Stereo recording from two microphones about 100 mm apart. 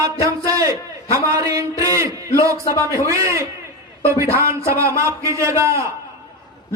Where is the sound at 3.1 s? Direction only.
30° right (ahead or behind).